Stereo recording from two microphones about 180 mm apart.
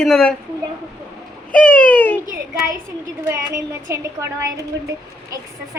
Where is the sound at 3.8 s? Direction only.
15° right (ahead or behind).